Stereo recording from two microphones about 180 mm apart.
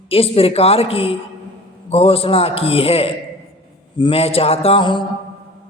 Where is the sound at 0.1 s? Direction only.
30° left (ahead or behind).